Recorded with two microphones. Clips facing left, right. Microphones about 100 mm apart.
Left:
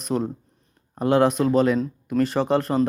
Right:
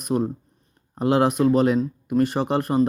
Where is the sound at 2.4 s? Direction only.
20° right (ahead or behind).